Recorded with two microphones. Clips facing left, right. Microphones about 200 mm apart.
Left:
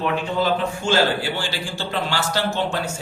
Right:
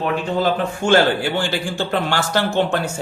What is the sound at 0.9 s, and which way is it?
A man's voice, 55° right (ahead or behind).